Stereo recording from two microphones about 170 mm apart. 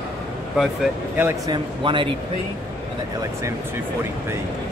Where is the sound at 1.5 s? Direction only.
30° right (ahead or behind).